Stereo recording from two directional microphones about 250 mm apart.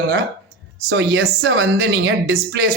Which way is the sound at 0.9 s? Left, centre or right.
Right.